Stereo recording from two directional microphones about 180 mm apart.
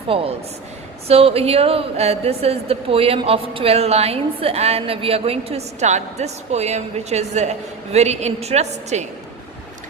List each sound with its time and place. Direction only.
0.1 s a woman's voice: 30° right (ahead or behind)